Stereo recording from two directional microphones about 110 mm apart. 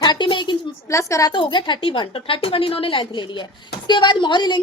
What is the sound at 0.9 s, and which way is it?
Speech, 25° left (ahead or behind).